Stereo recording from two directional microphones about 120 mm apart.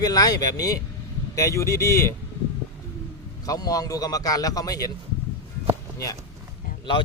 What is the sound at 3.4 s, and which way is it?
Speech, 30° left (ahead or behind).